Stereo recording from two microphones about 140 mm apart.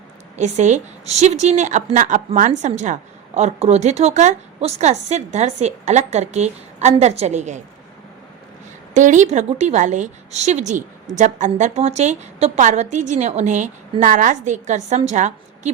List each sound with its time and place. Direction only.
0.3 s a woman's voice: 55° right (ahead or behind)
8.9 s a woman's voice: 60° right (ahead or behind)